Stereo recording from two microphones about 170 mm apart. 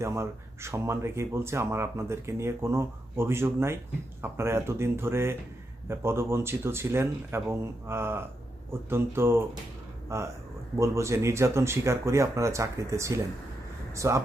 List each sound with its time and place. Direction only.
0.0 s speech: 15° right (ahead or behind)